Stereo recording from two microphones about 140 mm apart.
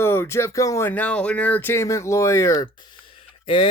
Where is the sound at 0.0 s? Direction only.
15° left (ahead or behind).